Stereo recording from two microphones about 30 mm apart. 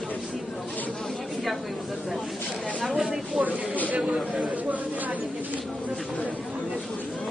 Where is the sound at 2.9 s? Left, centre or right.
Centre.